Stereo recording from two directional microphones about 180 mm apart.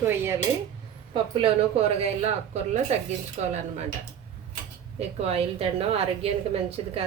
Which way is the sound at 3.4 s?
35° right (ahead or behind).